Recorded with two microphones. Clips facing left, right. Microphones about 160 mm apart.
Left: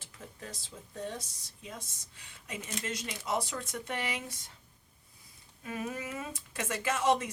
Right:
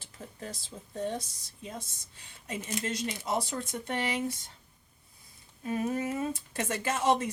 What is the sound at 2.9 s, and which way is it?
A woman's voice, 30° right (ahead or behind).